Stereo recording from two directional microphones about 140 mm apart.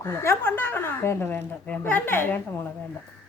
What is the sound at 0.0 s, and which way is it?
A woman's voice, 20° left (ahead or behind).